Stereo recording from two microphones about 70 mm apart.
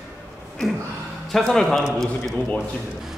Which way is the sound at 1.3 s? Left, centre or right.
Centre.